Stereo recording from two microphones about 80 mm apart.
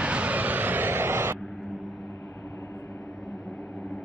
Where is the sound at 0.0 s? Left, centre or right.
Centre.